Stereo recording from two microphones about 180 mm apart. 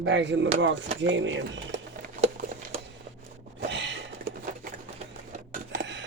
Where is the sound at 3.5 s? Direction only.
85° right.